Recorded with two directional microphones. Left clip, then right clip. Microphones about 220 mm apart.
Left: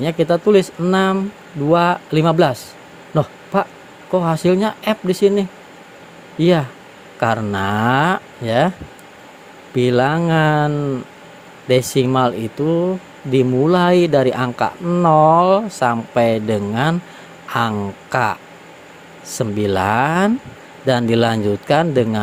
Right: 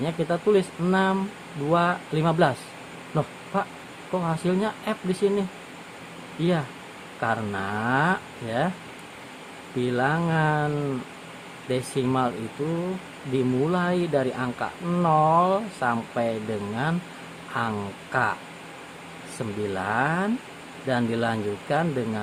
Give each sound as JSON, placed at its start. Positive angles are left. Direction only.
{"t": 0.0, "sound": "speech", "side_deg": 30}
{"t": 9.7, "sound": "speech", "side_deg": 30}
{"t": 13.3, "sound": "speech", "side_deg": 30}
{"t": 19.4, "sound": "speech", "side_deg": 35}